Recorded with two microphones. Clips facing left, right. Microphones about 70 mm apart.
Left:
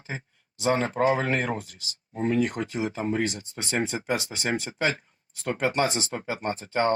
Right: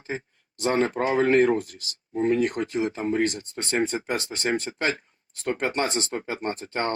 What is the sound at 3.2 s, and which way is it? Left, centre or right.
Speech, centre.